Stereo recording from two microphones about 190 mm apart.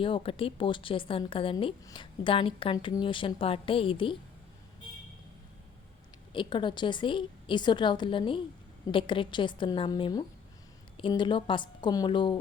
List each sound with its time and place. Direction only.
0.0 s a woman's voice: 30° left (ahead or behind)
6.3 s a woman's voice: 25° left (ahead or behind)